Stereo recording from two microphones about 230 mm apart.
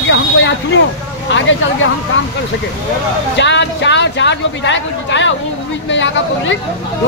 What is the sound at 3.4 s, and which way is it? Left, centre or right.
Speech, left.